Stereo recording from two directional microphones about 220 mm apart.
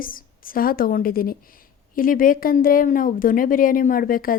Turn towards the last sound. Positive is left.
turn(degrees=40)  # may be behind; listen again after turning